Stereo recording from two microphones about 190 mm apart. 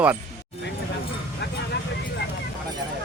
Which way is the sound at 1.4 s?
65° left (ahead or behind).